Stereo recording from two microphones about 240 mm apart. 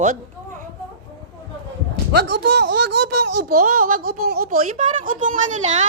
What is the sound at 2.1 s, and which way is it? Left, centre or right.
Speech, right.